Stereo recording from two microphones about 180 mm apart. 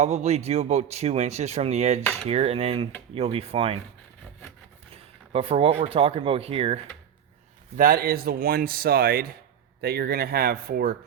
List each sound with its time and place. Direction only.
0.0 s speech: 40° right (ahead or behind)
5.3 s speech: 30° right (ahead or behind)
7.8 s speech: 55° right (ahead or behind)